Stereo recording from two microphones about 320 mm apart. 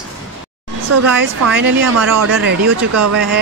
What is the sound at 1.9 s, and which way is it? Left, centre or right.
Speech, right.